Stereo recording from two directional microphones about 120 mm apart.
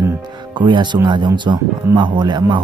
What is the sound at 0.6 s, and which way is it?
Speech, 40° right (ahead or behind).